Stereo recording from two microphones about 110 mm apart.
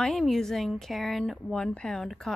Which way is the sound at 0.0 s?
5° left (ahead or behind).